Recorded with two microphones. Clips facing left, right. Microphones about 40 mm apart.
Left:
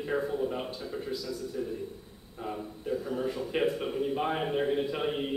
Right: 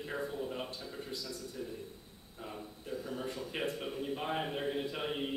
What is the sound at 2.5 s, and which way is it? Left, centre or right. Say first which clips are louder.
A man's voice: left 9 dB; centre.